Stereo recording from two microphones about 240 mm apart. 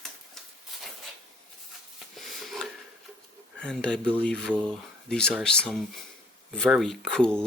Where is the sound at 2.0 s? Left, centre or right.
Centre.